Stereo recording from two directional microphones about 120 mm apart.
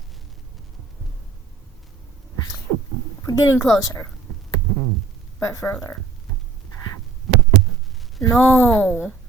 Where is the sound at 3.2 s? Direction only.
25° left (ahead or behind).